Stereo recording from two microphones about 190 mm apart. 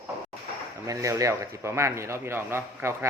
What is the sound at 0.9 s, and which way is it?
A man's voice, 15° right (ahead or behind).